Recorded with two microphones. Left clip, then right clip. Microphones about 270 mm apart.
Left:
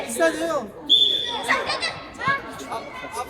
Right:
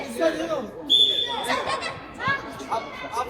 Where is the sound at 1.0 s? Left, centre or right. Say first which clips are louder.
Right 3 dB; centre.